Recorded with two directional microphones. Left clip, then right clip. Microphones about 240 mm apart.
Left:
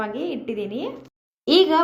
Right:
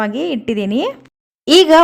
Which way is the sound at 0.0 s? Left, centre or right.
Right.